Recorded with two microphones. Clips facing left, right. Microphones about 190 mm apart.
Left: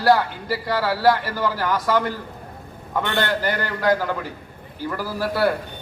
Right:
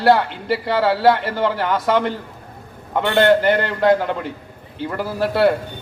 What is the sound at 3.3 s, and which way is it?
A man's voice, 25° right (ahead or behind).